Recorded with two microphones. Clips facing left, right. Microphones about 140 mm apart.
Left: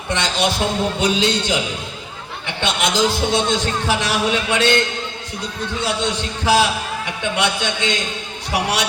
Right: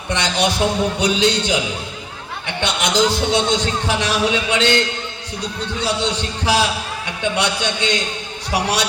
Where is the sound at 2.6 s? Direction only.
15° right (ahead or behind).